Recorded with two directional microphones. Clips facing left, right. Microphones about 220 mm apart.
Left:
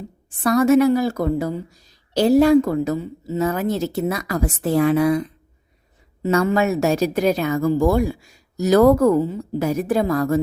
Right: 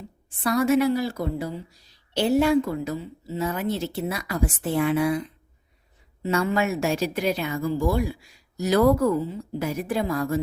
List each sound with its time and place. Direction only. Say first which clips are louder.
0.3 s a woman's voice: left 6 dB; 45° left (ahead or behind)